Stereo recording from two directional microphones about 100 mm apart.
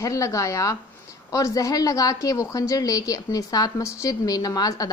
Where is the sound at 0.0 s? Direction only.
30° left (ahead or behind).